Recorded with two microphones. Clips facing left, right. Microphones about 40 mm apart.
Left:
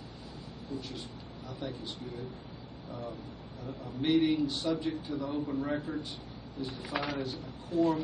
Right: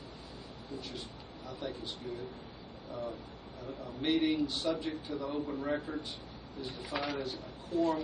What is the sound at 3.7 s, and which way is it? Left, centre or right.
Speech, centre.